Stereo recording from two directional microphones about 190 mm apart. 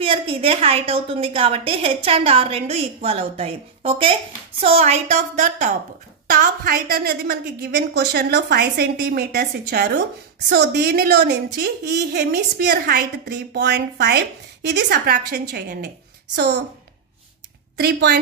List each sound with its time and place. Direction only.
0.0 s a woman's voice: 30° right (ahead or behind); by 16.6 s 65° right (ahead or behind)
17.7 s a woman's voice: 60° right (ahead or behind)